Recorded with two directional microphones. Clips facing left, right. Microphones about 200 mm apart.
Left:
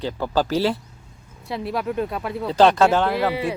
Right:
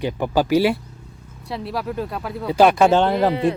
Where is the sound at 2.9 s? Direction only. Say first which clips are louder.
Right 3 dB; 25° right (ahead or behind).